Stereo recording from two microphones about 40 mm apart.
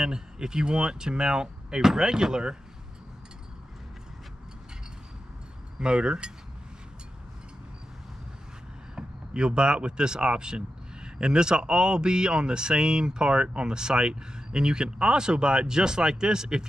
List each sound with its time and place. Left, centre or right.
0.0 s speech: centre
5.8 s speech: right
8.9 s speech: right